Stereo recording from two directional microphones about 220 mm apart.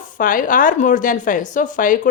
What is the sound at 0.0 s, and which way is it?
A woman's voice, 40° left (ahead or behind).